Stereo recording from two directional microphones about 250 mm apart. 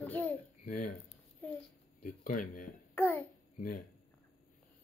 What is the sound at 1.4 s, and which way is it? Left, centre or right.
Speech, centre.